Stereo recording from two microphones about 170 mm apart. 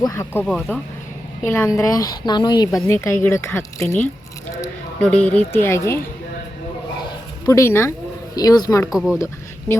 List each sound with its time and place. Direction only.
0.0 s a woman's voice: 20° left (ahead or behind)
0.4 s a woman's voice: 5° left (ahead or behind)
7.0 s a sound: 20° left (ahead or behind)
8.4 s a woman's voice: 20° left (ahead or behind)
8.9 s speech: 5° right (ahead or behind)
9.1 s a sound: 20° left (ahead or behind)